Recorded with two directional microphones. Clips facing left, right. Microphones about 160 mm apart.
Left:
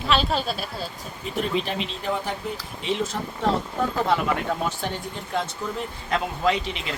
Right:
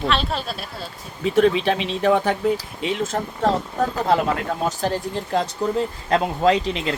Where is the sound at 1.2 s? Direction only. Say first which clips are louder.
Right 9 dB; 90° right; by 2.3 s 70° right (ahead or behind).